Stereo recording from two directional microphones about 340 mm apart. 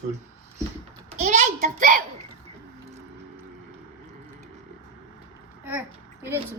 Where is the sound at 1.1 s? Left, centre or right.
Centre.